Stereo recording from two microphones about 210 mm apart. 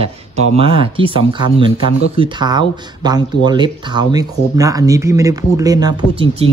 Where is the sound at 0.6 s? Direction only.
25° right (ahead or behind).